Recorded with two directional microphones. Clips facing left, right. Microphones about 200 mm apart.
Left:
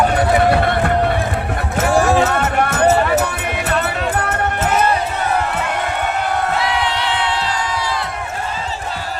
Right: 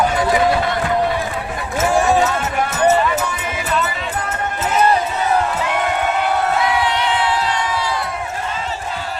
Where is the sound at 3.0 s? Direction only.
60° left (ahead or behind).